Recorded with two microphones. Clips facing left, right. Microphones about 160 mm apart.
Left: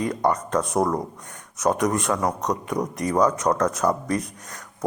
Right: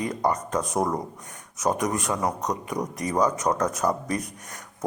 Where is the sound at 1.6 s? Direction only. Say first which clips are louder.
Left 3 dB; centre (ahead or behind).